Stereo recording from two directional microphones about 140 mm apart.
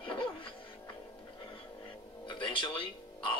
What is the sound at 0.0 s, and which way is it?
Music, 35° left (ahead or behind).